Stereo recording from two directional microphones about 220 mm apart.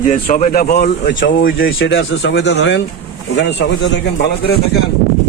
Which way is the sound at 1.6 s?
60° left (ahead or behind).